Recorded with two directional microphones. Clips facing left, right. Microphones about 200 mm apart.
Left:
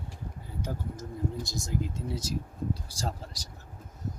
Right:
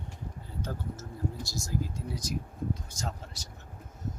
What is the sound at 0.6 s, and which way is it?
Speech, 15° left (ahead or behind).